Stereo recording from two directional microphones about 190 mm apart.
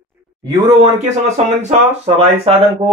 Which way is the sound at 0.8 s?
35° right (ahead or behind).